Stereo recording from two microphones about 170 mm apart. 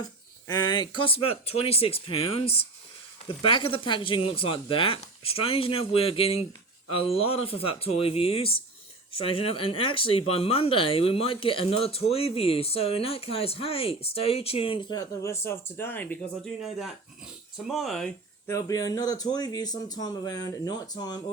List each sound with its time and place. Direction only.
0.0 s speech: 25° left (ahead or behind)
16.6 s speech: centre (ahead or behind)
18.4 s speech: 20° left (ahead or behind)